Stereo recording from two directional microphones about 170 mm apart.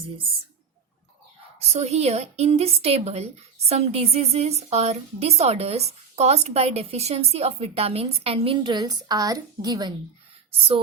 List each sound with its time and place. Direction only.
1.5 s a woman's voice: 40° right (ahead or behind)